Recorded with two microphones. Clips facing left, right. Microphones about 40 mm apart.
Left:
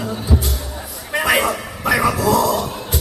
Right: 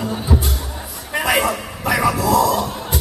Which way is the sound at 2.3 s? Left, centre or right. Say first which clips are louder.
Right 1 dB; centre.